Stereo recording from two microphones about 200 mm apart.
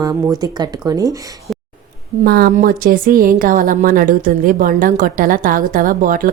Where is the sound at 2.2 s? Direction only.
50° right (ahead or behind).